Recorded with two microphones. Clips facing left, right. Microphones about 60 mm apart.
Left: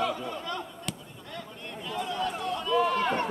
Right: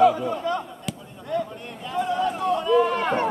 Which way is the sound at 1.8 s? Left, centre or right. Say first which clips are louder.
Right 7 dB; centre.